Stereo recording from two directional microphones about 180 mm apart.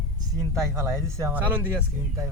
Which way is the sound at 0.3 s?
15° right (ahead or behind).